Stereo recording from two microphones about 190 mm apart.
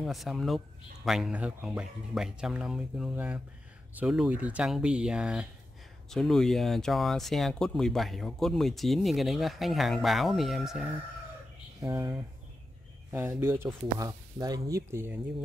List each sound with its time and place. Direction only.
0.0 s speech: centre (ahead or behind)
11.8 s speech: 20° right (ahead or behind)